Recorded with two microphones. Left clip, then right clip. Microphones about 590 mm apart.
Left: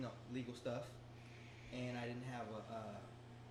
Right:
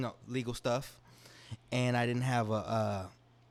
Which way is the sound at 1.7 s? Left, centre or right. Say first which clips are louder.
Right 15 dB; right.